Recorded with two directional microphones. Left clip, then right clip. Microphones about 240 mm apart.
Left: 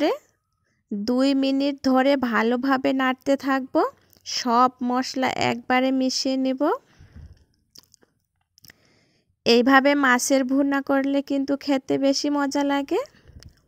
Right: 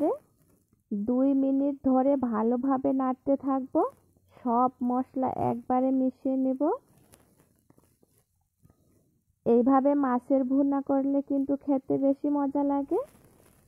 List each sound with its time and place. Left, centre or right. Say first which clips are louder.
1.2 s speech: left 4 dB; left
9.4 s speech: left 6 dB; left